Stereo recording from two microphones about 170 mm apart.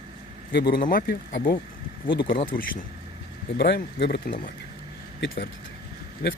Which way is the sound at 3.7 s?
65° left (ahead or behind).